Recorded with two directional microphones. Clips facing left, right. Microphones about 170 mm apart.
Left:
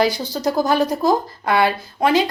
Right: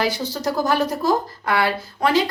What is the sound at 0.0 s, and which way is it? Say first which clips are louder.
Speech: left 4 dB; 15° left (ahead or behind).